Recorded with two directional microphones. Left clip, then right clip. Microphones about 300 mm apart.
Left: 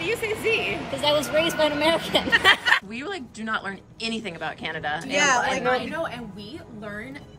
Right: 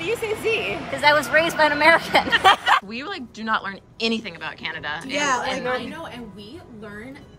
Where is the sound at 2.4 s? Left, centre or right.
Centre.